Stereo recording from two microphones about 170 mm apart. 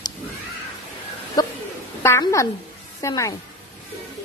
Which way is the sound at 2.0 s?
20° left (ahead or behind).